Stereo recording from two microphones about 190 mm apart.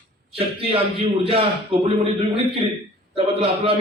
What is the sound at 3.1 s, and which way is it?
Speech, 30° right (ahead or behind).